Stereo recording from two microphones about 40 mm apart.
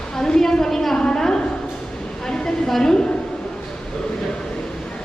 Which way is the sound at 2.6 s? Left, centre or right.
Centre.